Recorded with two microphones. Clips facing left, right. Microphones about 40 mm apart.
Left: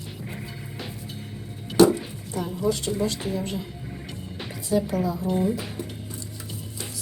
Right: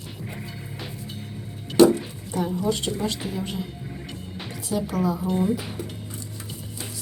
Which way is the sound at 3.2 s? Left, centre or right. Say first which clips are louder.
Left 1 dB; centre.